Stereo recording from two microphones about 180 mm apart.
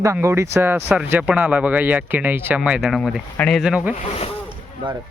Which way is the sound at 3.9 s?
35° left (ahead or behind).